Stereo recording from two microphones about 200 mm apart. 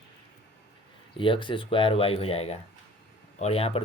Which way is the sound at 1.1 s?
25° left (ahead or behind).